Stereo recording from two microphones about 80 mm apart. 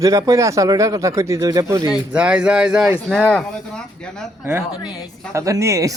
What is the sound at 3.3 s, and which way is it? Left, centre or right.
Speech, centre.